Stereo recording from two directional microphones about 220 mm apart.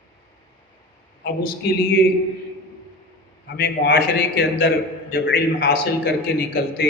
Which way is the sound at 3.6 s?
45° left (ahead or behind).